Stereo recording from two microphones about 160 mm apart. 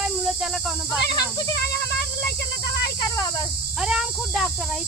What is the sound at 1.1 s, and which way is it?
Speech, 25° left (ahead or behind).